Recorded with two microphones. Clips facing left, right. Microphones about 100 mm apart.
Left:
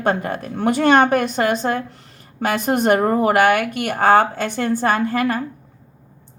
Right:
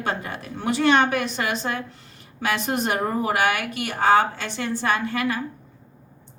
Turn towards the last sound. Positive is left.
turn(degrees=45)  # may be behind; listen again after turning